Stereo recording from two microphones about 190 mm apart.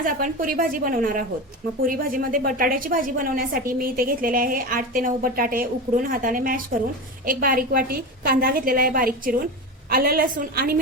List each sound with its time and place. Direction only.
0.0 s a woman's voice: 45° right (ahead or behind)